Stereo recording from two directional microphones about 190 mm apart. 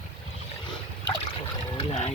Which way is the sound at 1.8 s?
30° left (ahead or behind).